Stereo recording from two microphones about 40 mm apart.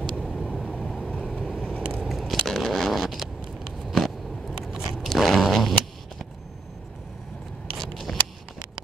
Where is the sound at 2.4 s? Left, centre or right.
Centre.